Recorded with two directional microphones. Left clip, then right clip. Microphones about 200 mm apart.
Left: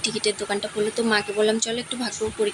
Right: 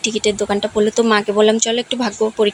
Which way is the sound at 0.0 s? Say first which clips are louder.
Right 7 dB; 30° right (ahead or behind).